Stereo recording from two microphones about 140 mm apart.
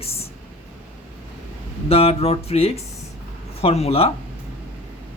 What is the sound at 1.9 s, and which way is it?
Speech, 45° left (ahead or behind).